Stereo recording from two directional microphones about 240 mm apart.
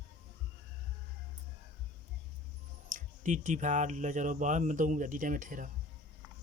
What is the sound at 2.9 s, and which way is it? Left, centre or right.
Speech, right.